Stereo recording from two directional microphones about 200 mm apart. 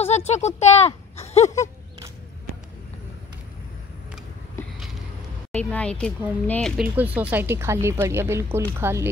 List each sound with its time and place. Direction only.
0.0 s speech: 35° left (ahead or behind)
5.5 s speech: 5° left (ahead or behind)
6.8 s speech: 5° right (ahead or behind)